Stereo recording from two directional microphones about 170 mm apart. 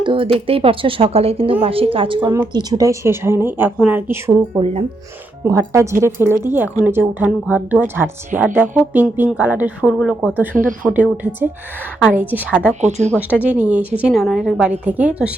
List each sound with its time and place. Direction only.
0.0 s speech: 30° right (ahead or behind); by 12.7 s 10° right (ahead or behind)
12.8 s speech: 40° right (ahead or behind)
13.1 s speech: 10° right (ahead or behind)